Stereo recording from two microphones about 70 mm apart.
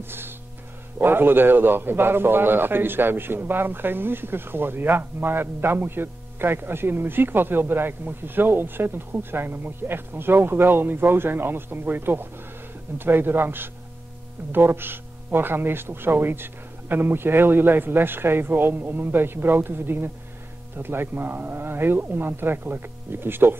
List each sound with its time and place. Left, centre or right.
0.9 s a man's voice: right